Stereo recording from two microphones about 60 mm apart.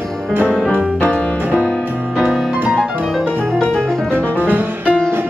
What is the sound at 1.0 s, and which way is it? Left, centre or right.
Music, left.